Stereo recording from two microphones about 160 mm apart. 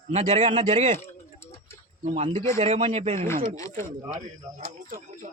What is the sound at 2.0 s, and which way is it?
Speech, 40° right (ahead or behind).